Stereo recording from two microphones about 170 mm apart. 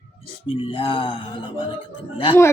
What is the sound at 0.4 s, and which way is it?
Speech, 35° left (ahead or behind).